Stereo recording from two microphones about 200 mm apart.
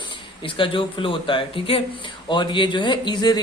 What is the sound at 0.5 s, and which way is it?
A man's voice, 25° left (ahead or behind).